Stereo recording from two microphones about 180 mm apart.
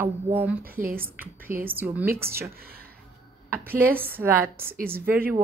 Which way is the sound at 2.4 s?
55° right (ahead or behind).